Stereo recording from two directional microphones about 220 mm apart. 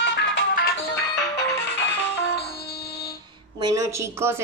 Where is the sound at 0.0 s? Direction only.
50° left (ahead or behind).